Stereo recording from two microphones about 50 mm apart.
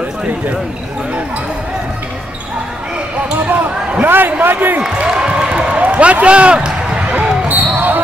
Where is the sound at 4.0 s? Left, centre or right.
Right.